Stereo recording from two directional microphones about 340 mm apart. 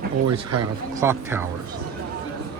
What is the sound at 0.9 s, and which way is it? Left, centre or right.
Speech, centre.